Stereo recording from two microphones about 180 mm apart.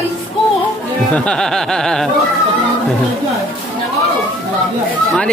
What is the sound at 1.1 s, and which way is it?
Music, 5° left (ahead or behind).